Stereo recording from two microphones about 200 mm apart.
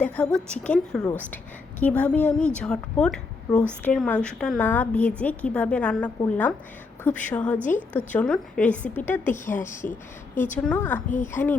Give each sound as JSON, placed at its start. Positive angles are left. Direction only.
{"t": 0.0, "sound": "a woman's voice", "side_deg": 5}
{"t": 9.5, "sound": "a woman's voice", "side_deg": 40}
{"t": 10.6, "sound": "a woman's voice", "side_deg": 5}